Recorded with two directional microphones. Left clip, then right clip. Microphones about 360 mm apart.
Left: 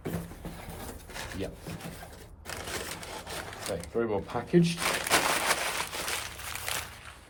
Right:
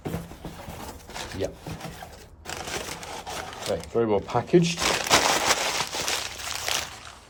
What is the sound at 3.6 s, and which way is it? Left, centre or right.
Crumpling, right.